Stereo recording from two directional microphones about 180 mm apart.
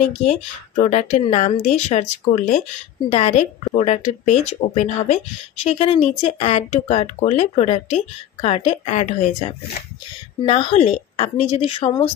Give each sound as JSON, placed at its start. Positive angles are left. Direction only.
{"t": 0.0, "sound": "speech", "side_deg": 40}